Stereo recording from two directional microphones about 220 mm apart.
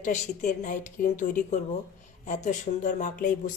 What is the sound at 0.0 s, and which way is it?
Speech, 35° left (ahead or behind).